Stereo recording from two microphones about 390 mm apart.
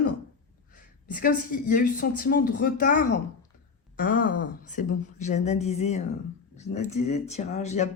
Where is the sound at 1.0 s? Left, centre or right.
Left.